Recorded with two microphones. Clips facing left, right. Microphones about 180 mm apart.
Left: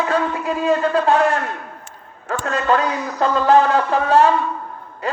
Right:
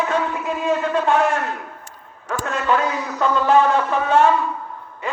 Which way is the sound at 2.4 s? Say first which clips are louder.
Left 2 dB; 35° left (ahead or behind).